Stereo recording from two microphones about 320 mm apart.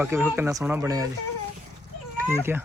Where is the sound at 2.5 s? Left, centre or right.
Centre.